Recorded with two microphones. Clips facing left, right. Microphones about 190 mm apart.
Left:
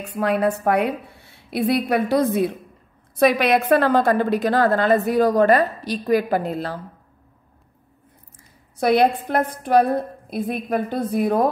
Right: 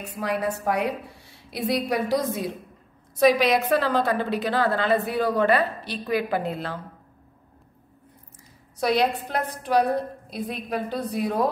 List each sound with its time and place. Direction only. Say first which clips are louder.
0.1 s a woman's voice: left 7 dB; 60° left (ahead or behind); by 6.8 s 40° left (ahead or behind)
8.7 s a woman's voice: left 5 dB; 55° left (ahead or behind)